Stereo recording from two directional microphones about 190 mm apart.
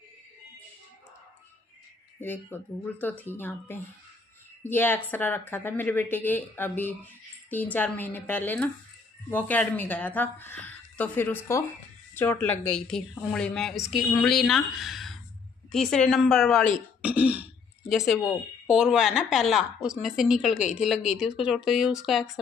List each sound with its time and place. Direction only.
2.1 s a woman's voice: 10° left (ahead or behind)